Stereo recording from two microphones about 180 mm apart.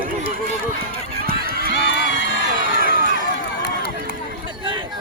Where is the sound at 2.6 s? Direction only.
55° right (ahead or behind).